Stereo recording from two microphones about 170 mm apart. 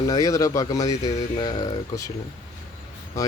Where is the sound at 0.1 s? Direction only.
20° left (ahead or behind).